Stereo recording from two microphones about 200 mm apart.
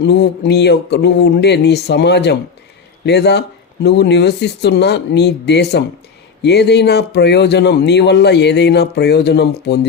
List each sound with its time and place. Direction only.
0.0 s speech: 60° left (ahead or behind)